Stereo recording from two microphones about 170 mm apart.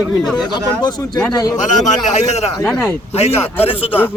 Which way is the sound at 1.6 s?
45° left (ahead or behind).